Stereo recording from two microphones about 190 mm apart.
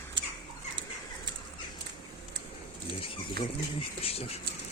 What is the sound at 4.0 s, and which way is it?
Speech, 30° left (ahead or behind).